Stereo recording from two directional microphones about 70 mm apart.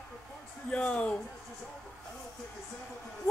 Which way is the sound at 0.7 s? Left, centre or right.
Centre.